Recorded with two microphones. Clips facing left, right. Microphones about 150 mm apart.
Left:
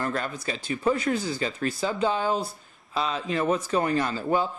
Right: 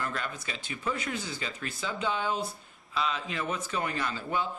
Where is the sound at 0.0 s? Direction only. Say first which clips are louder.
Left 6 dB; 40° left (ahead or behind).